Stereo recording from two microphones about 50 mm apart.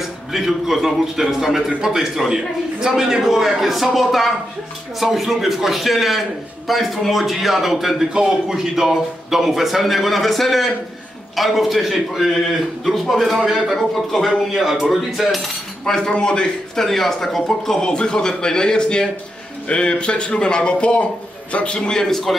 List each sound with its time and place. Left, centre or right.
0.0 s a man's voice: centre
15.8 s speech: centre
16.8 s speech: centre
22.0 s a man's voice: centre